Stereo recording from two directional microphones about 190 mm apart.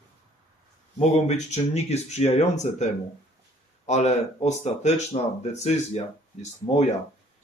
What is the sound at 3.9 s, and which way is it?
Speech, 35° left (ahead or behind).